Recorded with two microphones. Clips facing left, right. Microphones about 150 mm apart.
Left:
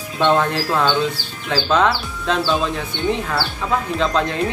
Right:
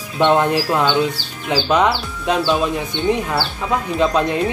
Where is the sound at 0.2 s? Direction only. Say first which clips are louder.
Right 2 dB; 15° right (ahead or behind).